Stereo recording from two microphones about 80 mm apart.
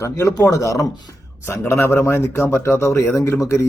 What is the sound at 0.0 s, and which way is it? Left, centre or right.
A man's voice, left.